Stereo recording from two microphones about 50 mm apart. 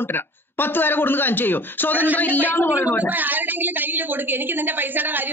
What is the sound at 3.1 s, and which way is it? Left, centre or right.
Speech, right.